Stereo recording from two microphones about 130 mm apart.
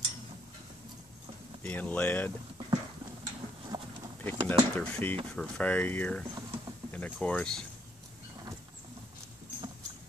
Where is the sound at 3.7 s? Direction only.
25° right (ahead or behind).